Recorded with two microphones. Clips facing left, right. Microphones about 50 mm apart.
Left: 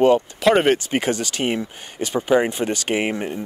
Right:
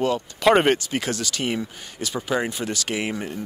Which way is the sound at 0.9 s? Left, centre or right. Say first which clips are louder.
Left 4 dB; left.